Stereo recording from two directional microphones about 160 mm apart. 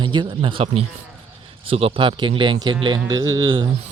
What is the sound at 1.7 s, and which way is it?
Speech, 35° right (ahead or behind).